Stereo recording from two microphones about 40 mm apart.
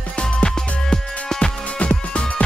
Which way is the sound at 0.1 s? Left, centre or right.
Left.